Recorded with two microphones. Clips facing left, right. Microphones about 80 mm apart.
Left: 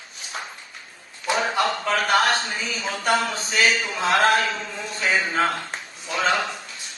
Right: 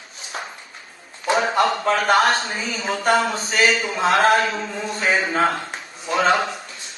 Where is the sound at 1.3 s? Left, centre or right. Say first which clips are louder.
Right 4 dB; right.